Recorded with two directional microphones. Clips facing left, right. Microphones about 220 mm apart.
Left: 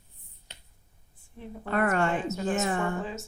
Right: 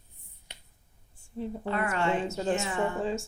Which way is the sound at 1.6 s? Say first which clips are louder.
Left 4 dB; 50° left (ahead or behind).